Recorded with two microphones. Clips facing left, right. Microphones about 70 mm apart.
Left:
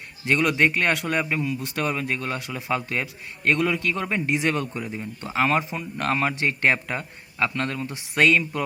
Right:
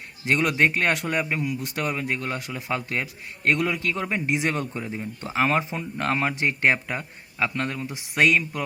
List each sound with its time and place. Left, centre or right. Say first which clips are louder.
0.3 s a man's voice: left 1 dB; centre